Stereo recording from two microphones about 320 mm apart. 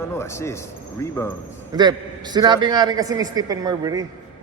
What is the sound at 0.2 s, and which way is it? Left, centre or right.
Speech, centre.